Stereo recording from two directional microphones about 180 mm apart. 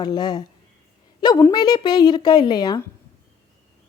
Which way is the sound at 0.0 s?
25° left (ahead or behind).